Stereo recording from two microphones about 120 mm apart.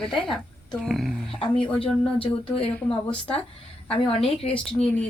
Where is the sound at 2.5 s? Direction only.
50° left (ahead or behind).